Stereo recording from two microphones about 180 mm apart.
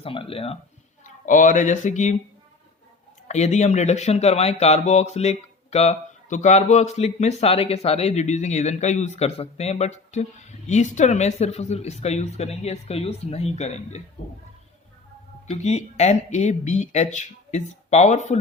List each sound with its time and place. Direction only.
0.0 s speech: 30° left (ahead or behind)
1.0 s speech: 45° left (ahead or behind)
3.2 s speech: 40° left (ahead or behind)
15.4 s speech: 40° left (ahead or behind)